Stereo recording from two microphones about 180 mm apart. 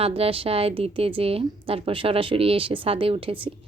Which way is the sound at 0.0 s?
35° right (ahead or behind).